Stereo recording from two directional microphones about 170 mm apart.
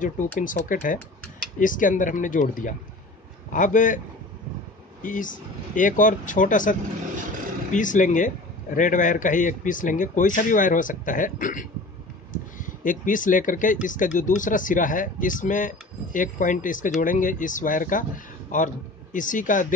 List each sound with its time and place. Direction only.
0.0 s speech: 50° left (ahead or behind)
5.0 s speech: 50° left (ahead or behind)